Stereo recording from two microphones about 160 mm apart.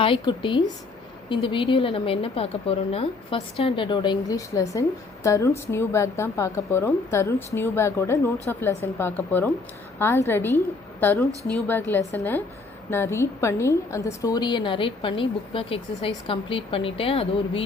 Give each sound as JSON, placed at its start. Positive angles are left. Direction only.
{"t": 0.0, "sound": "a woman's voice", "side_deg": 30}